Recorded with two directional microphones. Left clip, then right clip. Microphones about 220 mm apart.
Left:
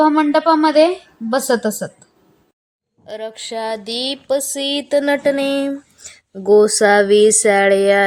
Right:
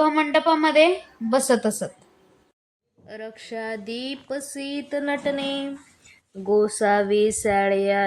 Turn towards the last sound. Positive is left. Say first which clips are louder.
# left 8 dB
turn(degrees=55)  # may be behind; listen again after turning